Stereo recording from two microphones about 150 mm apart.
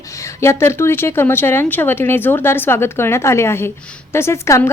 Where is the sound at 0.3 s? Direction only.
15° left (ahead or behind).